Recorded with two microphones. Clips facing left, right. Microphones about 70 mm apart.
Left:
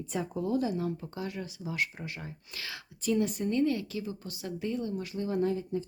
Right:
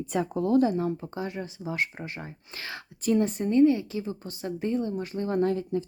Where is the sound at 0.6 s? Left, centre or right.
Right.